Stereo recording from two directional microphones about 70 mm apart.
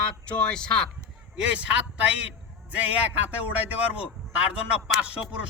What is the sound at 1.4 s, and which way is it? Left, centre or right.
Speech, centre.